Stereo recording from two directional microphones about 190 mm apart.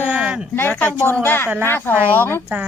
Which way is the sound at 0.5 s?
10° left (ahead or behind).